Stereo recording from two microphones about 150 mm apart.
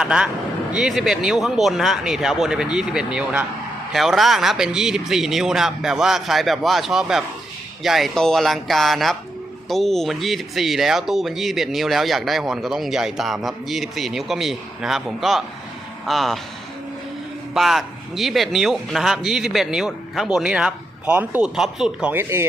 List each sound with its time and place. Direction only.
0.0 s speech: 5° right (ahead or behind)
17.5 s speech: centre (ahead or behind)
22.2 s speech: 15° right (ahead or behind)